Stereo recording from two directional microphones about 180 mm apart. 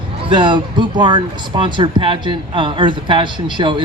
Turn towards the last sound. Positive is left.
turn(degrees=-25)  # may be behind; listen again after turning